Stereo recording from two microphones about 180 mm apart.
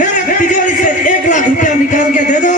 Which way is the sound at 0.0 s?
45° left (ahead or behind).